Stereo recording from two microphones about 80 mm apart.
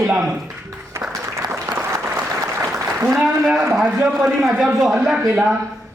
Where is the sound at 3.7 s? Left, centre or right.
Centre.